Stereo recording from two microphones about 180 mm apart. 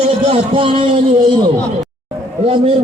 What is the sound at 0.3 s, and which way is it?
Speech, 30° right (ahead or behind).